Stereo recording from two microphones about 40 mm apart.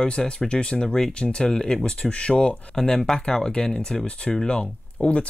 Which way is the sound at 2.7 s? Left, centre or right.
Centre.